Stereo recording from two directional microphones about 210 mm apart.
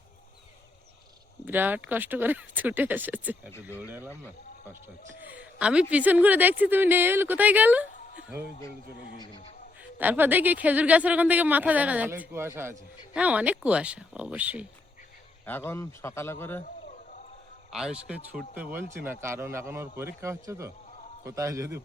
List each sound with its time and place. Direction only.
1.5 s a man's voice: 10° right (ahead or behind)
3.5 s speech: 10° left (ahead or behind)
5.2 s a woman's voice: 5° right (ahead or behind)
9.1 s speech: 20° left (ahead or behind)
10.0 s a man's voice: 10° right (ahead or behind)
15.4 s speech: 10° left (ahead or behind)
17.7 s a man's voice: centre (ahead or behind)